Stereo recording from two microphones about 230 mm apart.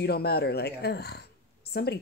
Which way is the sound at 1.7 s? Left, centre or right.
Left.